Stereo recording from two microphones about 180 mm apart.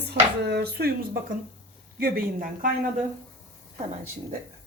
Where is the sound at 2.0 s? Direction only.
55° right (ahead or behind).